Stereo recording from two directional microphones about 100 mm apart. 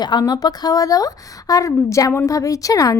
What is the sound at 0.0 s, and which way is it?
A woman's voice, 45° left (ahead or behind).